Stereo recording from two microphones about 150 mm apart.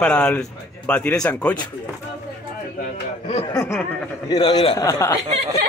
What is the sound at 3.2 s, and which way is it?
A man's voice, 35° left (ahead or behind).